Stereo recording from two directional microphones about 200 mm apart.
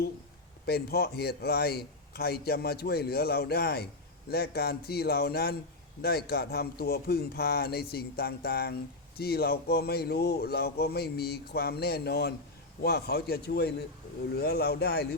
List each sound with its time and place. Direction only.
0.6 s speech: 50° left (ahead or behind)